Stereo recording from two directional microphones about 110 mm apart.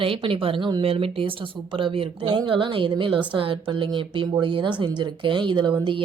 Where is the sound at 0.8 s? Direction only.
60° right (ahead or behind).